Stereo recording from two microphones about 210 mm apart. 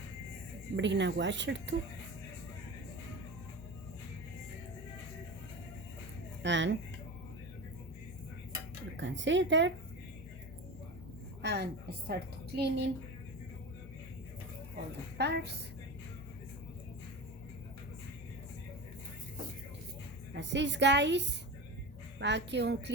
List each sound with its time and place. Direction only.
0.8 s a woman's voice: 60° right (ahead or behind)
6.4 s a woman's voice: 60° right (ahead or behind)
9.0 s a woman's voice: 60° right (ahead or behind)
11.4 s a woman's voice: 55° right (ahead or behind)
15.2 s a woman's voice: 50° right (ahead or behind)
20.3 s a woman's voice: 55° right (ahead or behind)